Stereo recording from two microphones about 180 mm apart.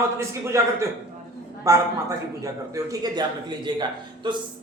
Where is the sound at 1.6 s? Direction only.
20° right (ahead or behind).